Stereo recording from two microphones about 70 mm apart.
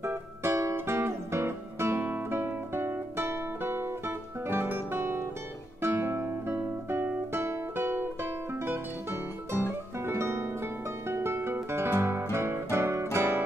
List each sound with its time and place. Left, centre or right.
0.0 s music: right
5.8 s guitar: right
9.9 s music: right